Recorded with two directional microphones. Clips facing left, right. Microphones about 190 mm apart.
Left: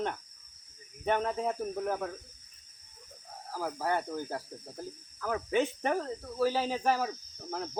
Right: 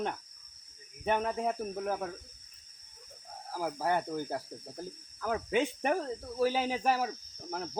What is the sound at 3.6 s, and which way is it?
Cricket, 15° right (ahead or behind).